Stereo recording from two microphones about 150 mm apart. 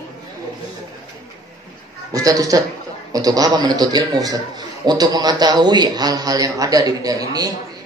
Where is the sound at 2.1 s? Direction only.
25° right (ahead or behind).